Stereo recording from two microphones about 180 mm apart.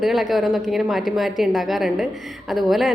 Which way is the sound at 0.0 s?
Centre (ahead or behind).